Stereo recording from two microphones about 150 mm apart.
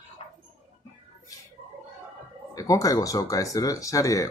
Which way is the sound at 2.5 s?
20° left (ahead or behind).